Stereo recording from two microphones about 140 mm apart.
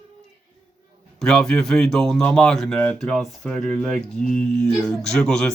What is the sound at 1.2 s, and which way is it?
A man's voice, 5° left (ahead or behind).